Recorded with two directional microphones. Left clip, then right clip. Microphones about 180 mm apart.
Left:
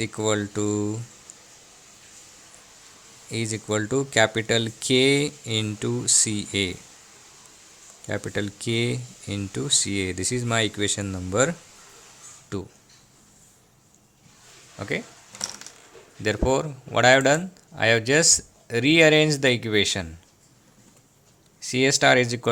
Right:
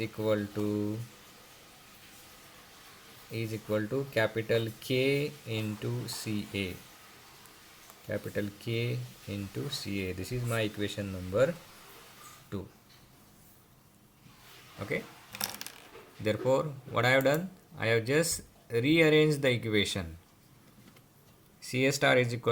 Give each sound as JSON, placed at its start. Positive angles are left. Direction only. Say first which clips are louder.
{"t": 0.0, "sound": "speech", "louder": "left 6 dB", "side_deg": 45}
{"t": 3.3, "sound": "speech", "louder": "left 6 dB", "side_deg": 50}
{"t": 8.0, "sound": "speech", "louder": "left 6 dB", "side_deg": 50}
{"t": 16.2, "sound": "speech", "louder": "left 5 dB", "side_deg": 30}
{"t": 21.7, "sound": "speech", "louder": "left 8 dB", "side_deg": 25}